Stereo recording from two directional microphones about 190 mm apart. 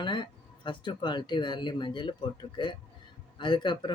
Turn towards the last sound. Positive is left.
turn(degrees=25)  # may be behind; listen again after turning